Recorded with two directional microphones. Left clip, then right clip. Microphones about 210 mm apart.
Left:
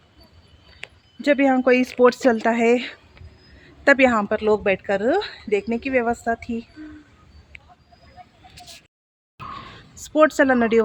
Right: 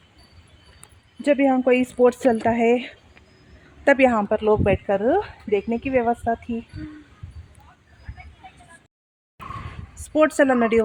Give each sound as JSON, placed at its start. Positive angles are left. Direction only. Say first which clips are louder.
{"t": 1.2, "sound": "a woman's voice", "louder": "left 1 dB", "side_deg": -5}
{"t": 9.9, "sound": "speech", "louder": "left 2 dB", "side_deg": 0}